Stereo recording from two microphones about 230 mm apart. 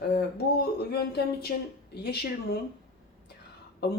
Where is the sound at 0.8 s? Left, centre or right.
Left.